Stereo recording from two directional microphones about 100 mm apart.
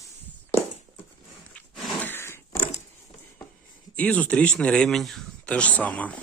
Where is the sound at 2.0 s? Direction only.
20° left (ahead or behind).